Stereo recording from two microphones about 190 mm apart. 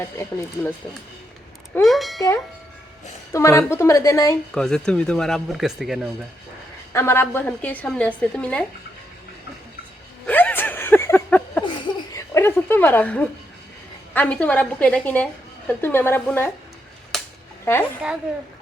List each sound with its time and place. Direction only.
0.0 s a woman's voice: 15° left (ahead or behind)
1.7 s speech: centre (ahead or behind)
3.3 s a woman's voice: 15° left (ahead or behind)
4.5 s speech: 5° left (ahead or behind)
6.9 s a woman's voice: 15° left (ahead or behind)
10.2 s a sound: 10° left (ahead or behind)
11.6 s chuckle: 20° left (ahead or behind)
14.1 s a woman's voice: 10° left (ahead or behind)
17.1 s cap gun: centre (ahead or behind)